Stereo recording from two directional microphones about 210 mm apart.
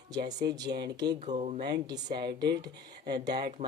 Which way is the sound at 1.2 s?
35° right (ahead or behind).